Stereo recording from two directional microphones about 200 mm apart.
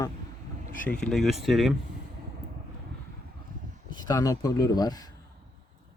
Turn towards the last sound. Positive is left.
turn(degrees=20)  # may be behind; listen again after turning